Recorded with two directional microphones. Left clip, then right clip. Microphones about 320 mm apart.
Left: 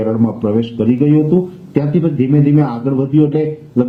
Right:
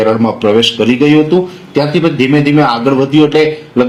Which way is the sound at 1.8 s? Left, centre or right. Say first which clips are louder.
Right 7 dB; centre.